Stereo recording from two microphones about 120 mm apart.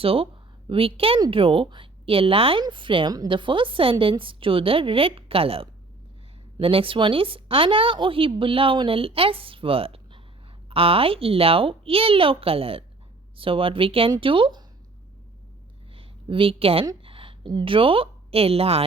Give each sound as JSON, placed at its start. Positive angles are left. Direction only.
{"t": 0.0, "sound": "a woman's voice", "side_deg": -50}
{"t": 16.0, "sound": "a woman's voice", "side_deg": -50}